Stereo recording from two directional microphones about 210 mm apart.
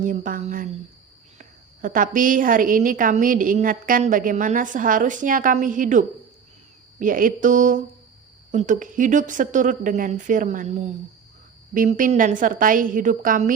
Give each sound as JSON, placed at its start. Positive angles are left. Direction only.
{"t": 0.0, "sound": "a woman's voice", "side_deg": -40}